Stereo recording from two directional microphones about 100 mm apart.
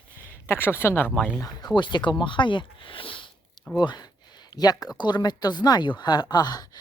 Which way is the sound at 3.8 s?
50° left (ahead or behind).